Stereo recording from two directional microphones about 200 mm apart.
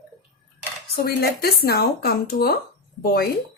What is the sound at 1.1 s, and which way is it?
Speech, 50° left (ahead or behind).